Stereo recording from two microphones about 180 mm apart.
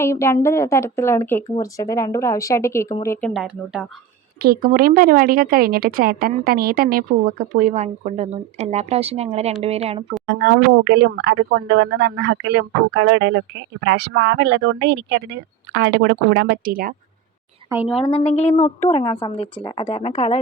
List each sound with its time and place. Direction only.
0.0 s speech: 15° left (ahead or behind)
3.4 s speech: 5° right (ahead or behind)
4.4 s a woman's voice: 55° right (ahead or behind); by 10.0 s 35° right (ahead or behind)
10.2 s speech: 75° right (ahead or behind); by 16.9 s 55° right (ahead or behind)
18.0 s a woman's voice: 35° left (ahead or behind)